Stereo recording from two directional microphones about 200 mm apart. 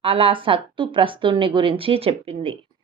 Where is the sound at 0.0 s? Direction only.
25° right (ahead or behind).